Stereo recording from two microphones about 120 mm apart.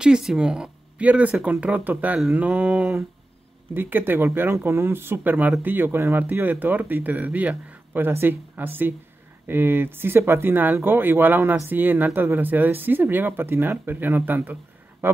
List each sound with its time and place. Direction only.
0.0 s speech: 5° right (ahead or behind)